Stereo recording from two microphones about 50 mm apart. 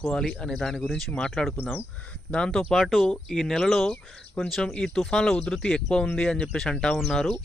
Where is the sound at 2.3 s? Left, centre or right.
Centre.